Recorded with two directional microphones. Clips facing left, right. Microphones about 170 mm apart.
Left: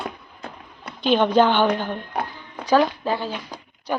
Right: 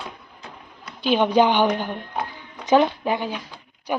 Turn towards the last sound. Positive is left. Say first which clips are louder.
# even
turn(degrees=-10)  # may be behind; listen again after turning